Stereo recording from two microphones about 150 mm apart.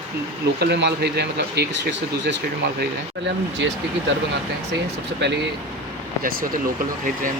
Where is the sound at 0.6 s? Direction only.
90° right.